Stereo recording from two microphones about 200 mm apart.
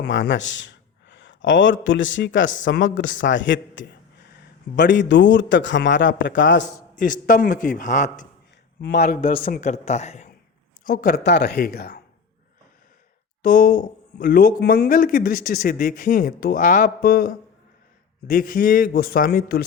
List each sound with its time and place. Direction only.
0.1 s a sound: 65° left (ahead or behind)
1.8 s a man's voice: 70° left (ahead or behind)
6.9 s a man's voice: 40° left (ahead or behind)
8.8 s a man's voice: 55° left (ahead or behind); by 10.2 s 35° left (ahead or behind)
10.8 s speech: 45° left (ahead or behind)
13.4 s speech: 45° left (ahead or behind)